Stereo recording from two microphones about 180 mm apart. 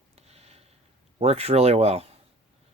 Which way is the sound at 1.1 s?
35° right (ahead or behind).